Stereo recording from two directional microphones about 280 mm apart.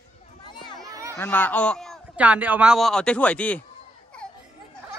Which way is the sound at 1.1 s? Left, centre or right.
Centre.